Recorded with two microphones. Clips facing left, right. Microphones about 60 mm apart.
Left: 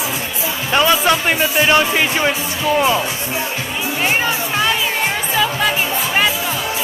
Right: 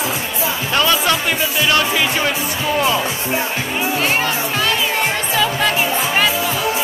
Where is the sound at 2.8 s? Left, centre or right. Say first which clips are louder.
Even; centre.